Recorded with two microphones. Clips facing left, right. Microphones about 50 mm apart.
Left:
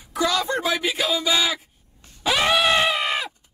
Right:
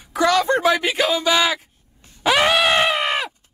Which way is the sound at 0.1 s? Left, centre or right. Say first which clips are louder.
Right 5 dB; right.